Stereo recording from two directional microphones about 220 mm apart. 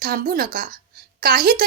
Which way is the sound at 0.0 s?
40° right (ahead or behind).